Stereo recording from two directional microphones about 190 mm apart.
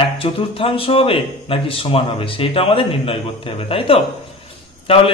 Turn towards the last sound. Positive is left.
turn(degrees=30)  # may be behind; listen again after turning